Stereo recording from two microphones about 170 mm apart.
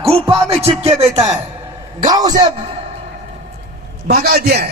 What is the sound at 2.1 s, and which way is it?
Speech, 25° right (ahead or behind).